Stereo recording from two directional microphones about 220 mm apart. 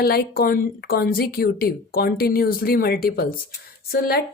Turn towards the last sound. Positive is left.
turn(degrees=45)  # may be behind; listen again after turning